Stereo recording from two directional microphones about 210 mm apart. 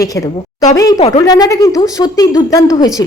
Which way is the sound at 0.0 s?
15° left (ahead or behind).